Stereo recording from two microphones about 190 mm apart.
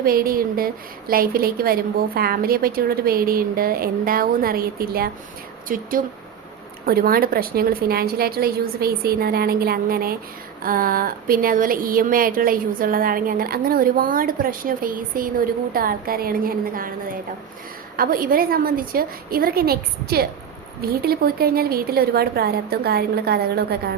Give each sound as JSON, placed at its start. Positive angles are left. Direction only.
{"t": 0.0, "sound": "speech", "side_deg": -50}
{"t": 17.9, "sound": "a woman's voice", "side_deg": -50}